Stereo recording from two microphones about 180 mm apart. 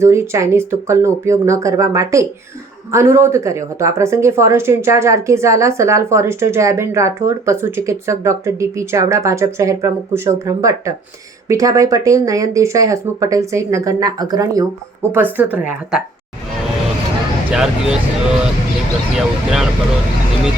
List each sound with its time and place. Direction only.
0.0 s a woman's voice: 15° right (ahead or behind)
15.1 s a woman's voice: 10° right (ahead or behind)
17.5 s speech: 5° right (ahead or behind)
19.1 s speech: centre (ahead or behind)